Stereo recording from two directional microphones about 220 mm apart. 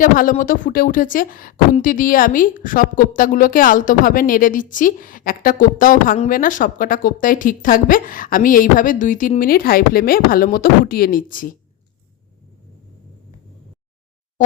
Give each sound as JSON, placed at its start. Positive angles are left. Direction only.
{"t": 0.0, "sound": "speech", "side_deg": 40}